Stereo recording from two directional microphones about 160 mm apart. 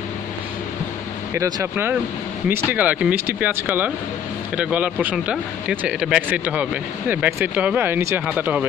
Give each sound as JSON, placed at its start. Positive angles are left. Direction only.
{"t": 1.3, "sound": "speech", "side_deg": -15}